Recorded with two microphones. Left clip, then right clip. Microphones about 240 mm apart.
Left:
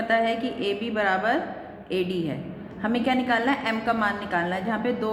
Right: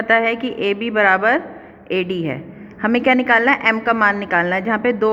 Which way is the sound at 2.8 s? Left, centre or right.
Right.